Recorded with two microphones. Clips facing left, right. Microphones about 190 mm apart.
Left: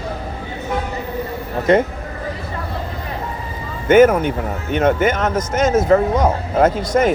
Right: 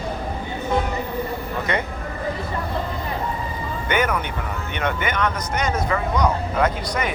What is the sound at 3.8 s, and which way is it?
Speech, 45° left (ahead or behind).